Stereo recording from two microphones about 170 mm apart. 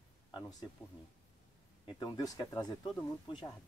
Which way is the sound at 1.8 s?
25° left (ahead or behind).